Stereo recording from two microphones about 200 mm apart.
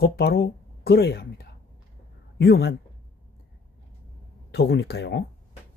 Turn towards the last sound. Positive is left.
turn(degrees=55)  # may be behind; listen again after turning